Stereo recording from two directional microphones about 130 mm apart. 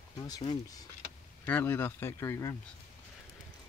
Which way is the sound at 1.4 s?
15° left (ahead or behind).